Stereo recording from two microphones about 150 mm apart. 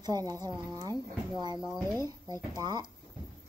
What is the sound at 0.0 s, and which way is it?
Speech, 25° right (ahead or behind).